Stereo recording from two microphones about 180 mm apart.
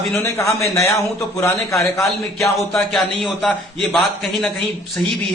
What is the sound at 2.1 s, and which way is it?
A man's voice, centre (ahead or behind).